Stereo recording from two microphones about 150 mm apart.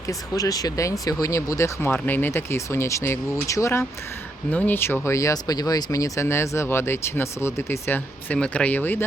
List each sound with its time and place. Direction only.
0.1 s speech: 25° left (ahead or behind)